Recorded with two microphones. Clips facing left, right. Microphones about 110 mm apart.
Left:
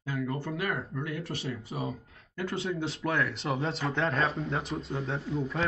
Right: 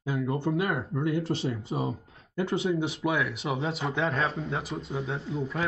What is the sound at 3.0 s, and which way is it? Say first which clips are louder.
Speech: right 2 dB; 5° right (ahead or behind).